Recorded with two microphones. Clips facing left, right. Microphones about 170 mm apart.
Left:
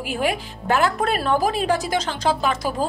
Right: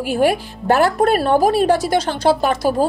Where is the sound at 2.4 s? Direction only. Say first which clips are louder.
Right 6 dB; 45° right (ahead or behind).